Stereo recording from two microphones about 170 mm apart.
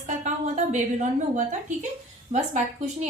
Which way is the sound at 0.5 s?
45° right (ahead or behind).